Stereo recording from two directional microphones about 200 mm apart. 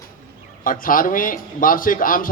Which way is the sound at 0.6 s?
45° left (ahead or behind).